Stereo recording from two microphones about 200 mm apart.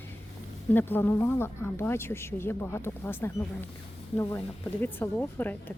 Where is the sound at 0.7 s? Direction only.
10° left (ahead or behind).